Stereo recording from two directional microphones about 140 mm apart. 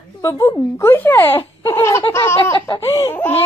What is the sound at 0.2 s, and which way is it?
Speech, 20° left (ahead or behind).